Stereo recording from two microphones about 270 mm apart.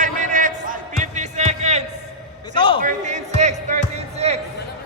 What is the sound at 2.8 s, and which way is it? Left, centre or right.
Music, right.